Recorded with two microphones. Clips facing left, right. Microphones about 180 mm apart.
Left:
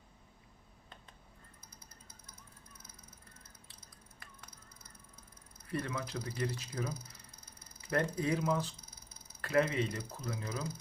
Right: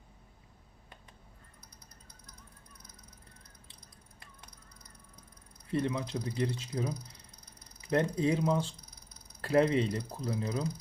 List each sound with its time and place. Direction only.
4.2 s a sound: 20° right (ahead or behind)
5.6 s mechanisms: 20° right (ahead or behind)
9.4 s speech: 30° right (ahead or behind)
10.1 s ratchet: 35° right (ahead or behind)
10.4 s ratchet: 20° right (ahead or behind)